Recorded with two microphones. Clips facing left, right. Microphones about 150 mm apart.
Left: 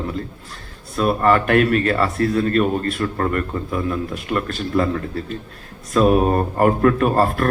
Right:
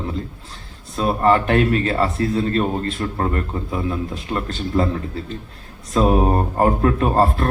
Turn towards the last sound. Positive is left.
turn(degrees=-25)  # may be behind; listen again after turning